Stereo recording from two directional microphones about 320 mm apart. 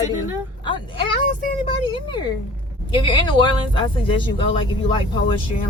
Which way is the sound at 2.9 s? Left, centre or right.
Centre.